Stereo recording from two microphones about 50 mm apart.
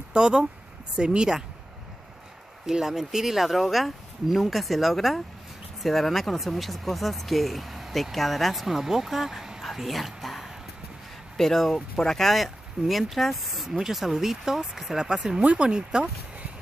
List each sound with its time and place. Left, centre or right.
0.1 s speech: centre
2.6 s speech: centre
9.7 s a sound: centre
11.3 s speech: centre; by 16.1 s right